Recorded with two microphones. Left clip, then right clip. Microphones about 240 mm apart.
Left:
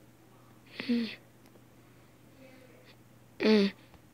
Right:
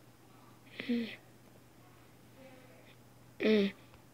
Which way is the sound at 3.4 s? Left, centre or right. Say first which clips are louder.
Left 4 dB; centre.